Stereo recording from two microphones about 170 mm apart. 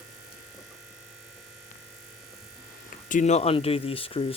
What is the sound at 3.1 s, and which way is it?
Speech, 45° left (ahead or behind).